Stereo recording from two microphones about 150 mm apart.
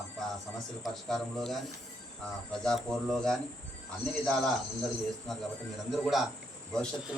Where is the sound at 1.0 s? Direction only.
Centre (ahead or behind).